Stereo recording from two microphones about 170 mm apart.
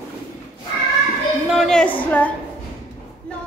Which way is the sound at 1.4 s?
Centre (ahead or behind).